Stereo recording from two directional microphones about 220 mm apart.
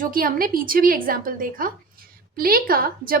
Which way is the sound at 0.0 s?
40° right (ahead or behind).